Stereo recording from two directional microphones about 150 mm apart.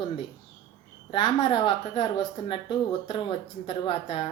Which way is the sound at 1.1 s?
35° left (ahead or behind).